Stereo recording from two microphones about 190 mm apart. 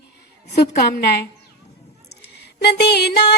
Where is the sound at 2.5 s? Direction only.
60° left (ahead or behind).